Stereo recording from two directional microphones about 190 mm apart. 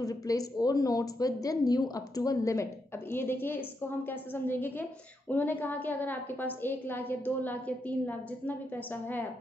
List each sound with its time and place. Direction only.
0.0 s speech: 20° left (ahead or behind)